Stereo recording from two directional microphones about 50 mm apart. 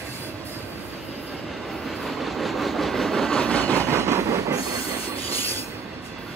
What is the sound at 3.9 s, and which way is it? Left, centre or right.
Train, right.